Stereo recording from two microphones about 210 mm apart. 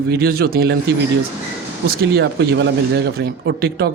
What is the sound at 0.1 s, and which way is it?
A man's voice, 50° right (ahead or behind).